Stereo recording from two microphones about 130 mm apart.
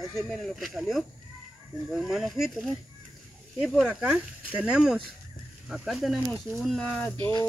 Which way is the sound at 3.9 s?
10° right (ahead or behind).